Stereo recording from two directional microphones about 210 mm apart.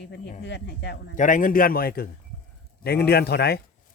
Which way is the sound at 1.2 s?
40° left (ahead or behind).